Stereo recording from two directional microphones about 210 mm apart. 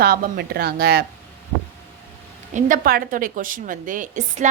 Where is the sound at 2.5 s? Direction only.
40° right (ahead or behind).